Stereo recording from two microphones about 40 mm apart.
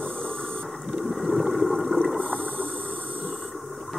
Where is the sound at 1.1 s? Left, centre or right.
Centre.